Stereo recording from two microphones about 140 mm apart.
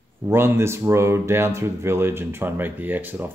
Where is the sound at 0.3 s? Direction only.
15° right (ahead or behind).